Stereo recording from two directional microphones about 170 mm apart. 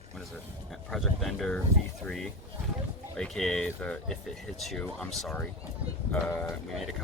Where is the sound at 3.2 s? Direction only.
5° left (ahead or behind).